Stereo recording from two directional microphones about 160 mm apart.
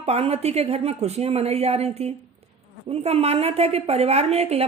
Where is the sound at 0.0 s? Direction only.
40° right (ahead or behind).